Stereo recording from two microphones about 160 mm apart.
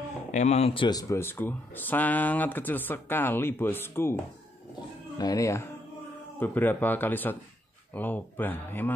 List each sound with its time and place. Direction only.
0.3 s speech: 45° left (ahead or behind); by 8.9 s 10° left (ahead or behind)